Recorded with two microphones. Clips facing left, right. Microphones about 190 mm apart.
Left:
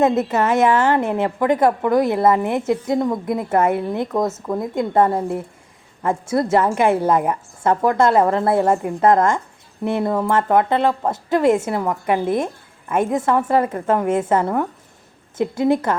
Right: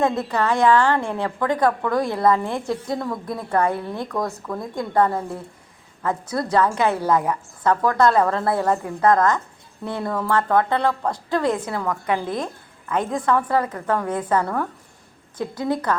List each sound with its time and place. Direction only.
0.0 s a woman's voice: 20° left (ahead or behind)